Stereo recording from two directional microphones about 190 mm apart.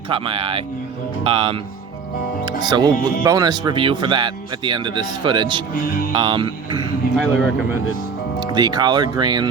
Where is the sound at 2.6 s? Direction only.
20° right (ahead or behind).